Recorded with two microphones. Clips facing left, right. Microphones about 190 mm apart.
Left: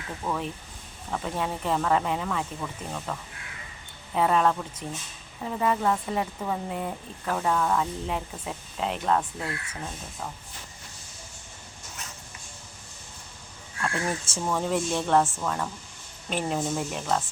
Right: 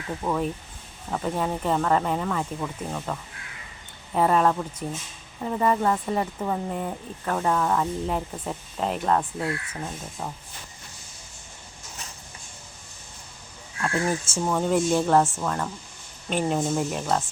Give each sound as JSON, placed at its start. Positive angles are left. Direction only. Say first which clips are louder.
{"t": 0.2, "sound": "speech", "louder": "right 3 dB", "side_deg": -20}
{"t": 1.1, "sound": "speech", "louder": "right 3 dB", "side_deg": 0}
{"t": 13.8, "sound": "speech", "louder": "right 4 dB", "side_deg": -5}